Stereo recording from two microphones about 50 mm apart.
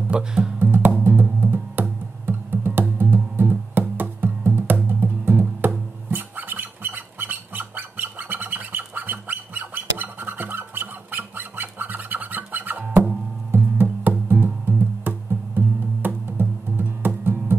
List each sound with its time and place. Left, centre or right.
0.1 s speech: centre
0.6 s music: right